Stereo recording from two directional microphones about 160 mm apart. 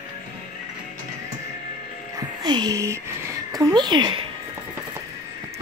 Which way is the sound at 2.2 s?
25° right (ahead or behind).